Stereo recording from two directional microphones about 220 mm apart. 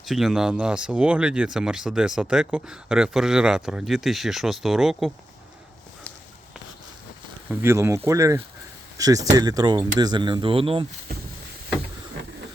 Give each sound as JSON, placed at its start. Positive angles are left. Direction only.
{"t": 0.0, "sound": "speech", "side_deg": 0}
{"t": 7.5, "sound": "speech", "side_deg": -10}